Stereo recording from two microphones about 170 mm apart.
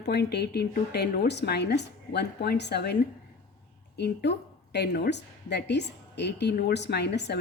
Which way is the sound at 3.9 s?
80° left.